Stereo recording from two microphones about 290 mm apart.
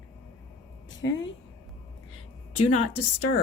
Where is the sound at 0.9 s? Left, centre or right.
Left.